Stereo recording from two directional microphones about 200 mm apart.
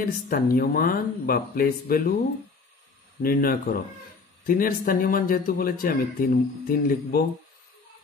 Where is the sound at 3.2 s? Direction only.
45° left (ahead or behind).